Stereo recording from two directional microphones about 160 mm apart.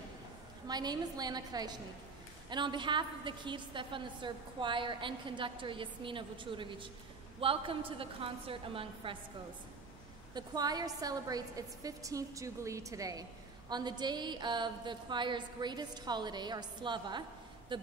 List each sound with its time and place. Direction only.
0.7 s a woman's voice: 25° right (ahead or behind)
10.3 s a woman's voice: 25° right (ahead or behind)